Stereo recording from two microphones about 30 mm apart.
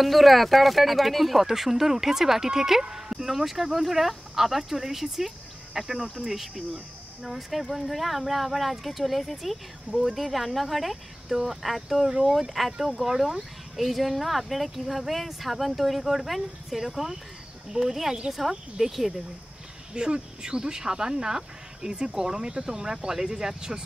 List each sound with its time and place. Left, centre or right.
0.0 s speech: centre
19.9 s speech: right